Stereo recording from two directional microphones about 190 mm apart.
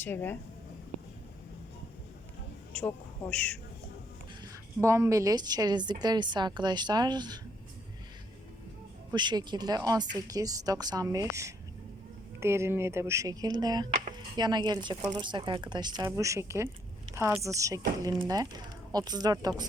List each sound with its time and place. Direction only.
0.0 s speech: 10° left (ahead or behind)
2.7 s speech: 5° left (ahead or behind)
4.8 s a woman's voice: 15° right (ahead or behind)
9.1 s a woman's voice: 20° right (ahead or behind)